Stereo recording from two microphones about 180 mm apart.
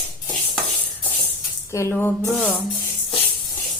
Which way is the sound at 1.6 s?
15° left (ahead or behind).